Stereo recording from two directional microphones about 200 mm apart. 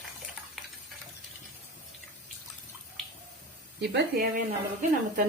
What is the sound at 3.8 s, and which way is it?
Speech, 55° right (ahead or behind).